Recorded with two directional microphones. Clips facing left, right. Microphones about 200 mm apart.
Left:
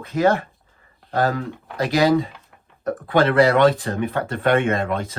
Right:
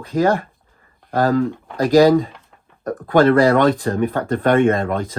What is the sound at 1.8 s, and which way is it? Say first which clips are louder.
Speech: right 6 dB; 45° right (ahead or behind).